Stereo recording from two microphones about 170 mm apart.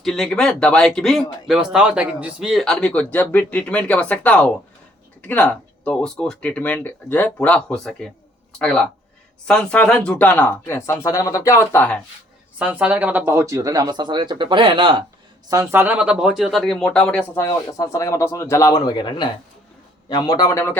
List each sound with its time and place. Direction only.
0.0 s speech: centre (ahead or behind)
12.5 s speech: 10° right (ahead or behind); by 15.0 s 30° right (ahead or behind)
15.4 s a man's voice: 20° right (ahead or behind); by 20.7 s 15° left (ahead or behind)